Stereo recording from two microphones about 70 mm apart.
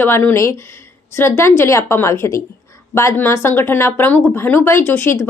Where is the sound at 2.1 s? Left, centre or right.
Left.